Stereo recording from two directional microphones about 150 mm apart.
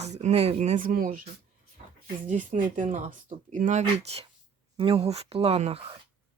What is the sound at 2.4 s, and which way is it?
Speech, 60° right (ahead or behind).